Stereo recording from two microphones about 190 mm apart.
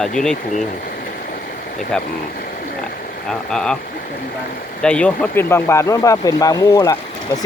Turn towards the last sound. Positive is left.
turn(degrees=20)  # may be behind; listen again after turning